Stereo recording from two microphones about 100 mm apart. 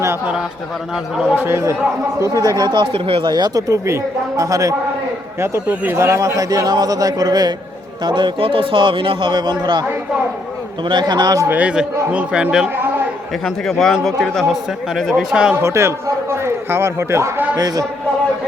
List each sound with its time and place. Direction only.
1.4 s a man's voice: 25° right (ahead or behind)
5.6 s speech: 20° right (ahead or behind); by 7.5 s 40° right (ahead or behind)
8.0 s a man's voice: 50° right (ahead or behind)
10.8 s a man's voice: 50° right (ahead or behind)
11.4 s a man's voice: 15° right (ahead or behind)
13.4 s a man's voice: 5° left (ahead or behind)
15.6 s a man's voice: 25° right (ahead or behind)
17.6 s speech: 40° right (ahead or behind)